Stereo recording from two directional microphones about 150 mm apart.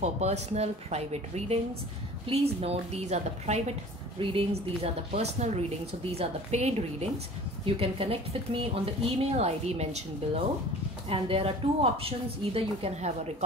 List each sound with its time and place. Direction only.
0.0 s speech: 50° right (ahead or behind)
4.2 s a woman's voice: 35° right (ahead or behind)